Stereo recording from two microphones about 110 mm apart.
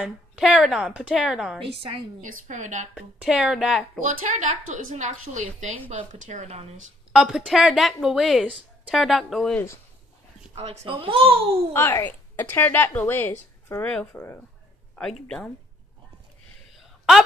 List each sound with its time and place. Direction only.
0.0 s a woman's voice: 5° right (ahead or behind)
1.6 s speech: 55° right (ahead or behind)
2.4 s a woman's voice: 90° right
2.9 s a woman's voice: 10° right (ahead or behind)
4.5 s a woman's voice: 90° right
7.1 s a woman's voice: 5° right (ahead or behind)
10.5 s speech: 80° right
10.9 s speech: 55° right (ahead or behind)
11.7 s a woman's voice: 20° left (ahead or behind)
13.8 s speech: 10° left (ahead or behind)